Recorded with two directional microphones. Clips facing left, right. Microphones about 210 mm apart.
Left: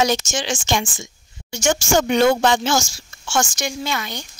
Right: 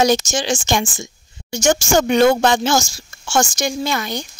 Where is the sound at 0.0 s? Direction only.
35° right (ahead or behind).